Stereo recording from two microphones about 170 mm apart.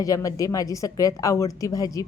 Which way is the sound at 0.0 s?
20° left (ahead or behind).